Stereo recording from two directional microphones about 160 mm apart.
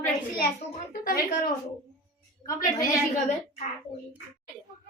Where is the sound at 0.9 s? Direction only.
60° left (ahead or behind).